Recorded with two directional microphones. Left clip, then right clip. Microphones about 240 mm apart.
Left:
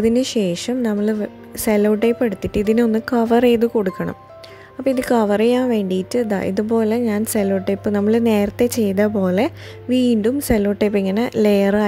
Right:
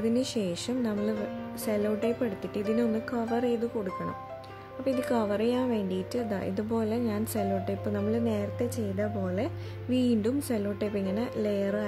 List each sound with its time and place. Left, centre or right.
0.0 s speech: left